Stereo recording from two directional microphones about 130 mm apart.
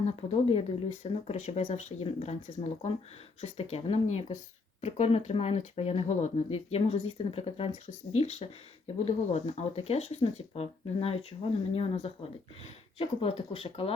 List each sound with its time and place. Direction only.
0.0 s speech: 50° left (ahead or behind)
7.7 s speech: 60° left (ahead or behind); by 13.9 s 45° left (ahead or behind)